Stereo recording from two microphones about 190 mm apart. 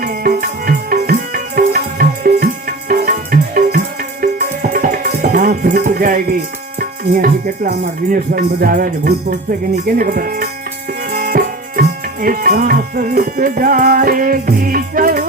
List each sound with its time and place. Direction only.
0.0 s music: 50° right (ahead or behind)
6.7 s speech: 50° right (ahead or behind)
11.1 s music: 45° right (ahead or behind)